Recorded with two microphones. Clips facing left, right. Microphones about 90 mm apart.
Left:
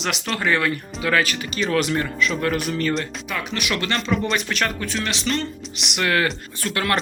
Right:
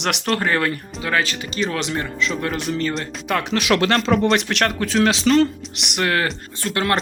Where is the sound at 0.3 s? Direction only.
40° right (ahead or behind); by 2.6 s 25° right (ahead or behind).